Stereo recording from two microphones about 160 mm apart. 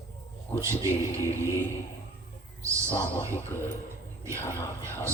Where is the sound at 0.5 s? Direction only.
15° right (ahead or behind).